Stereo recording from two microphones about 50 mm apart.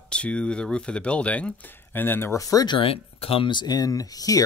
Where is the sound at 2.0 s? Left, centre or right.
Left.